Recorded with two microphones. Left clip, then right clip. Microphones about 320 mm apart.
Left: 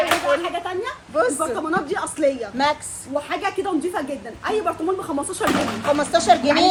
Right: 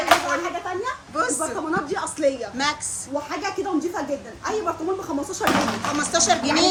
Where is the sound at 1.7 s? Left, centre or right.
Left.